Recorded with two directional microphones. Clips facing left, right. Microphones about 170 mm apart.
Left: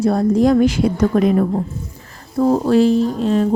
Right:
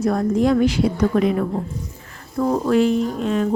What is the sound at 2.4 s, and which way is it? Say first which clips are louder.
A woman's voice: left 4 dB; 30° left (ahead or behind).